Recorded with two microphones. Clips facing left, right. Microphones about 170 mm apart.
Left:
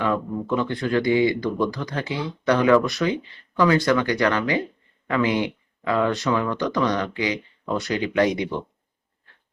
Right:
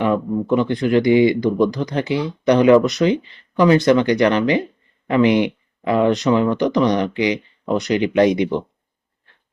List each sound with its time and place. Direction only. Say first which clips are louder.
0.0 s speech: right 5 dB; 20° right (ahead or behind)